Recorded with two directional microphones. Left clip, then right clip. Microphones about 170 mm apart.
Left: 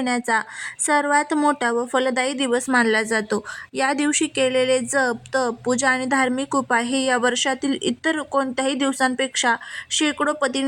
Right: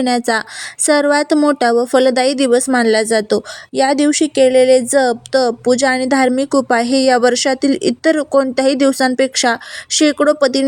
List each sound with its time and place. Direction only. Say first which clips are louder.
0.0 s a woman's voice: right 6 dB; 25° right (ahead or behind)